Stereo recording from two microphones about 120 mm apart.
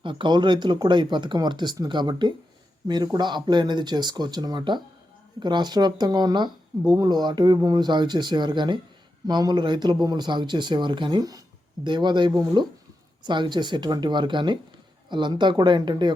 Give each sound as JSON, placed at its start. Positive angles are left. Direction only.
{"t": 0.0, "sound": "speech", "side_deg": -45}